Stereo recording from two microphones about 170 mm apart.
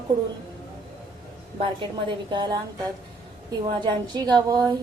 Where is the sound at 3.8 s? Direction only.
25° right (ahead or behind).